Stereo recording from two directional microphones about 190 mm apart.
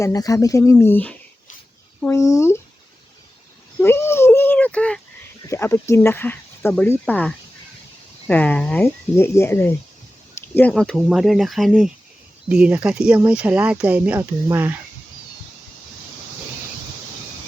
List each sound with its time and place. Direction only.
0.0 s speech: 20° left (ahead or behind)
3.8 s a sound: 10° left (ahead or behind)
5.5 s speech: 15° left (ahead or behind); by 14.8 s 10° right (ahead or behind)